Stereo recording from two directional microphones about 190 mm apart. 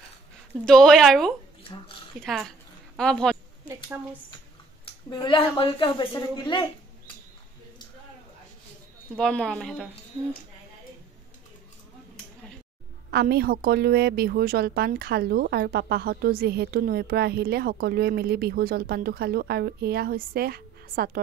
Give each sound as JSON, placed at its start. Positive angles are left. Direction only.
{"t": 0.7, "sound": "a woman's voice", "side_deg": 0}
{"t": 1.7, "sound": "a woman's voice", "side_deg": 25}
{"t": 2.2, "sound": "a woman's voice", "side_deg": 0}
{"t": 3.6, "sound": "a woman's voice", "side_deg": -10}
{"t": 5.1, "sound": "a woman's voice", "side_deg": 20}
{"t": 9.2, "sound": "a woman's voice", "side_deg": 5}
{"t": 13.1, "sound": "a woman's voice", "side_deg": -55}